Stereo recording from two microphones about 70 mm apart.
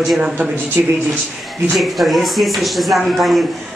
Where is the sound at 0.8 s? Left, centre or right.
Right.